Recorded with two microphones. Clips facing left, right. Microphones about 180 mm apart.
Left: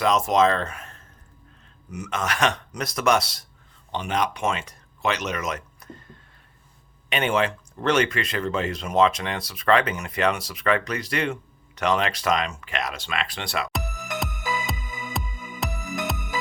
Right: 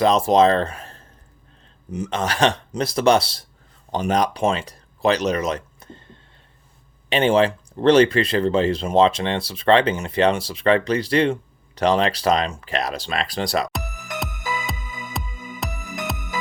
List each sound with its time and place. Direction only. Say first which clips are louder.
0.0 s speech: right 4 dB; 30° right (ahead or behind)
15.1 s music: right 1 dB; centre (ahead or behind)